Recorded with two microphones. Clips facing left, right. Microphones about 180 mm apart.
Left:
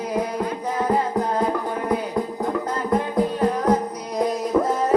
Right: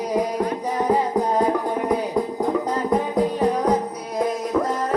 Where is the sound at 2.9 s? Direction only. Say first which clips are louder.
Even; 15° right (ahead or behind).